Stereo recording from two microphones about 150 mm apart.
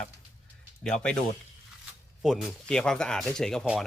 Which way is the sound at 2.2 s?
Centre (ahead or behind).